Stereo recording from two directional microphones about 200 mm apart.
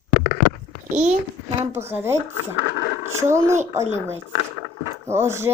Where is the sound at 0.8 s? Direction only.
40° right (ahead or behind).